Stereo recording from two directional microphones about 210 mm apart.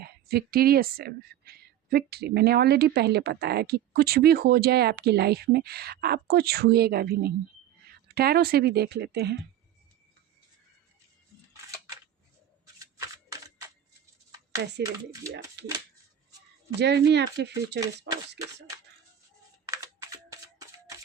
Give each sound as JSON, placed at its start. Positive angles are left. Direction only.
{"t": 0.0, "sound": "speech", "side_deg": -50}
{"t": 12.8, "sound": "shuffling cards", "side_deg": -15}
{"t": 15.6, "sound": "speech", "side_deg": -55}
{"t": 16.8, "sound": "speech", "side_deg": -55}
{"t": 19.6, "sound": "computer keyboard", "side_deg": -15}